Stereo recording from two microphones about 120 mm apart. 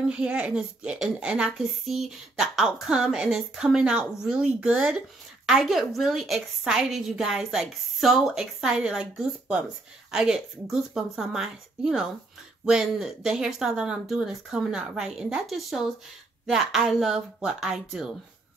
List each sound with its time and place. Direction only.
0.1 s a woman's voice: 10° right (ahead or behind)